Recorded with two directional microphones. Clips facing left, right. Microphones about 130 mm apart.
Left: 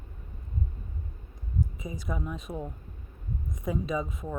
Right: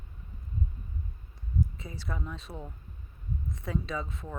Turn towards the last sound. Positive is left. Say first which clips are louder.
# left 5 dB
turn(degrees=15)  # may be behind; listen again after turning